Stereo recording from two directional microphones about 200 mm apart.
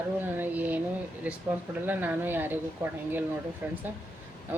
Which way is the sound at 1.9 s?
10° right (ahead or behind).